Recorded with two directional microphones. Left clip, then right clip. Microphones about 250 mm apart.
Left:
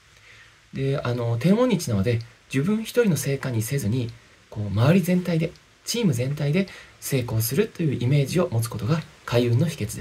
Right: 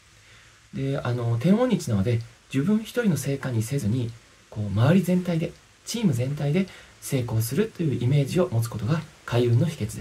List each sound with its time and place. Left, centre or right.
0.7 s speech: centre